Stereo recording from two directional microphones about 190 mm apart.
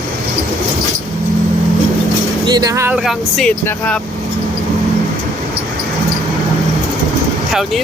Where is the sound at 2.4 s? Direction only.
20° right (ahead or behind).